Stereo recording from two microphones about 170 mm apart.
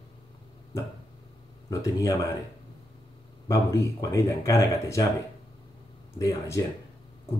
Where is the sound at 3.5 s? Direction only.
15° left (ahead or behind).